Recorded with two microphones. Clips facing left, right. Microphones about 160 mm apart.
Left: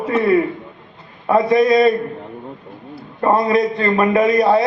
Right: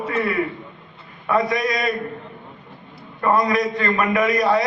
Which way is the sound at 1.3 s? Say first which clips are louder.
Left 7 dB; 30° left (ahead or behind).